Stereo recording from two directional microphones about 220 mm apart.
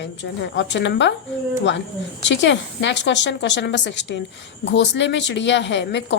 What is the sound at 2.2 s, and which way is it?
A woman's voice, 55° left (ahead or behind).